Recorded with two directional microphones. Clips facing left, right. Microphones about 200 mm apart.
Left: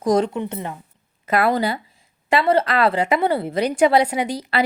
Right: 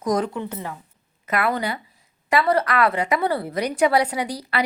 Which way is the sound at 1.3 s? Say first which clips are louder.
Left 4 dB; 35° left (ahead or behind).